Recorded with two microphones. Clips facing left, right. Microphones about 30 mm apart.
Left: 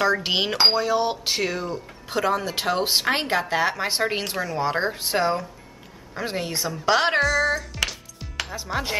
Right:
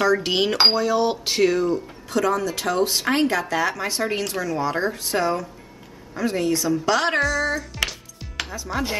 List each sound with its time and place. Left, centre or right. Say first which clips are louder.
0.1 s speech: right 2 dB; centre
2.0 s speech: right 2 dB; left
7.2 s music: left 1 dB; centre
8.6 s speech: right 2 dB; centre